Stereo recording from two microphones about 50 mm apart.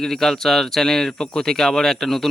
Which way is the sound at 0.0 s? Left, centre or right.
Centre.